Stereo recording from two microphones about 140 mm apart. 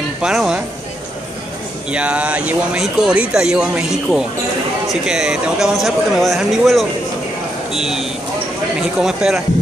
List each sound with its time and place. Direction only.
0.2 s speech: 5° right (ahead or behind)
1.9 s speech: 10° right (ahead or behind)